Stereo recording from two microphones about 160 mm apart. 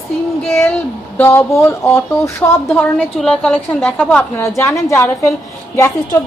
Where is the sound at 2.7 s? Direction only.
5° left (ahead or behind).